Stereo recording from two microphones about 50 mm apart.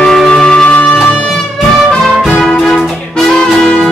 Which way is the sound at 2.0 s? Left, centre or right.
Centre.